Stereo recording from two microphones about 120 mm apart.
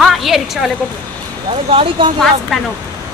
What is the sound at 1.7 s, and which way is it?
Speech, 50° right (ahead or behind).